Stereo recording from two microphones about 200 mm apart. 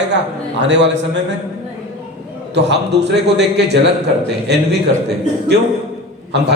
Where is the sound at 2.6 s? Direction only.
60° right (ahead or behind).